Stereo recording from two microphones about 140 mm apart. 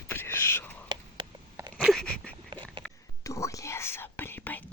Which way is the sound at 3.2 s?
20° left (ahead or behind).